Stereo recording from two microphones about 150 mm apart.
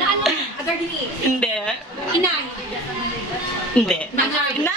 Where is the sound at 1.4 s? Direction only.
5° left (ahead or behind).